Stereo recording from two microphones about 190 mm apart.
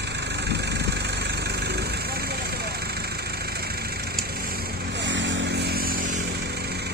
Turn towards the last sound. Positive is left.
turn(degrees=-75)  # may be behind; listen again after turning